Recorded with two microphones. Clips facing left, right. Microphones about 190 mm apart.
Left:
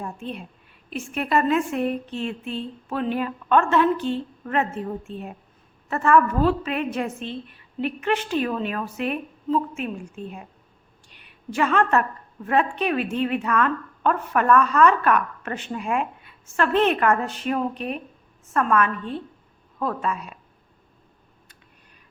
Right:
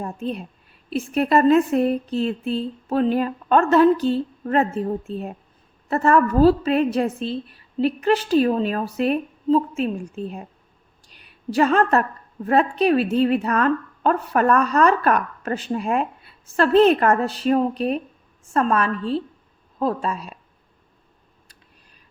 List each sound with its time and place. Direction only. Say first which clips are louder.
0.0 s a woman's voice: right 5 dB; 40° right (ahead or behind)